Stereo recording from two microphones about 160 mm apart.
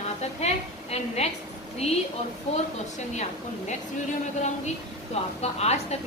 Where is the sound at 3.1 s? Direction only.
45° left (ahead or behind).